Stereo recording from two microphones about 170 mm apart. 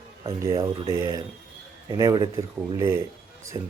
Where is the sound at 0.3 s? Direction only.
20° right (ahead or behind).